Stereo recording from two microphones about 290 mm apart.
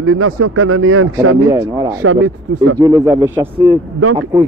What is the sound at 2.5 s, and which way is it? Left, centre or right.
Speech, right.